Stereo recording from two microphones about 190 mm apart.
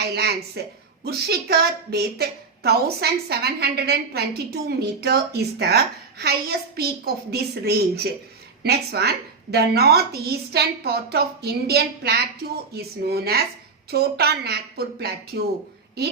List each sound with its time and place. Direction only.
0.0 s a woman's voice: 55° right (ahead or behind)